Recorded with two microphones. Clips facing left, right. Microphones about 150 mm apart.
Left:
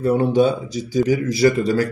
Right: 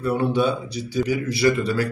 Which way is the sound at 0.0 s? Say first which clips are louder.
Left 5 dB; 40° left (ahead or behind).